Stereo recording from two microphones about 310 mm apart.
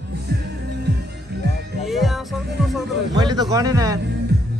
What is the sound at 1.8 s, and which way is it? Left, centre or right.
Music, centre.